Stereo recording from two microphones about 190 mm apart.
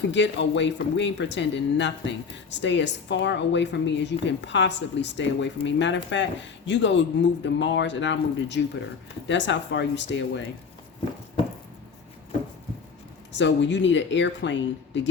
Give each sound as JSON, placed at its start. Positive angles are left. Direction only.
{"t": 0.1, "sound": "a woman's voice", "side_deg": 70}
{"t": 13.3, "sound": "a woman's voice", "side_deg": 70}